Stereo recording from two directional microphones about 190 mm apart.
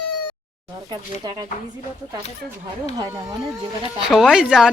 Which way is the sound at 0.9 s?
20° right (ahead or behind).